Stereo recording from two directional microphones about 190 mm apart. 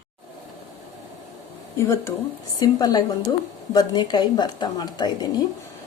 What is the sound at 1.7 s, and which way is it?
Speech, 15° left (ahead or behind).